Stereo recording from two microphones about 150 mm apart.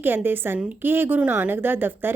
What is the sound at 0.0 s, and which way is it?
A woman's voice, 15° right (ahead or behind).